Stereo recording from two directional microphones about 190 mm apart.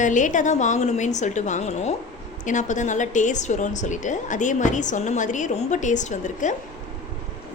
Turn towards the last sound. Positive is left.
turn(degrees=40)  # may be behind; listen again after turning